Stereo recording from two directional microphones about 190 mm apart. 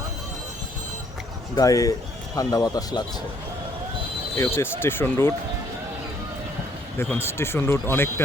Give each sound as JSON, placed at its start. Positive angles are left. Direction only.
{"t": 1.5, "sound": "a man's voice", "side_deg": 20}
{"t": 4.4, "sound": "a man's voice", "side_deg": 10}
{"t": 7.0, "sound": "a man's voice", "side_deg": 10}